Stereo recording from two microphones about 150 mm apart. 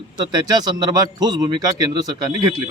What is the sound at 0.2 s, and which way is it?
A man's voice, 25° right (ahead or behind).